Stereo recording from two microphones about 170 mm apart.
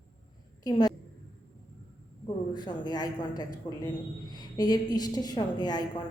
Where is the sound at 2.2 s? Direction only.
25° left (ahead or behind).